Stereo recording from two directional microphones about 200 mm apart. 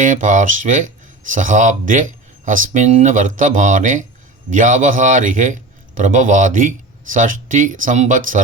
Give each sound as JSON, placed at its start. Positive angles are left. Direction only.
{"t": 0.0, "sound": "speech", "side_deg": -40}